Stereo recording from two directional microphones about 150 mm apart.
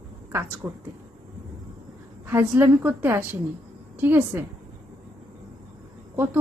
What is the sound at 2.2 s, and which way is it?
A woman's voice, 15° right (ahead or behind).